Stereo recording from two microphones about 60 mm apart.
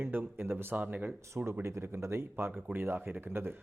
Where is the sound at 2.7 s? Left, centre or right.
Right.